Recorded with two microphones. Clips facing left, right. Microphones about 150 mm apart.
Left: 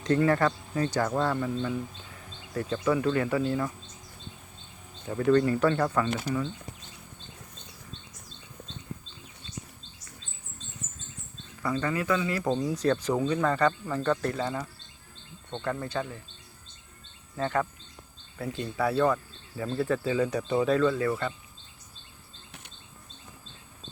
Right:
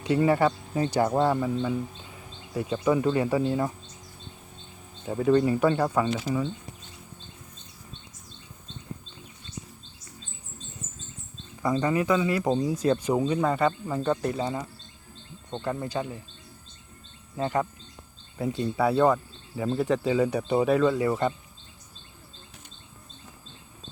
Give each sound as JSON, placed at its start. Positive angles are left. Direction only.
{"t": 0.0, "sound": "speech", "side_deg": -10}
{"t": 5.0, "sound": "speech", "side_deg": -15}
{"t": 11.7, "sound": "speech", "side_deg": -20}
{"t": 17.3, "sound": "speech", "side_deg": -15}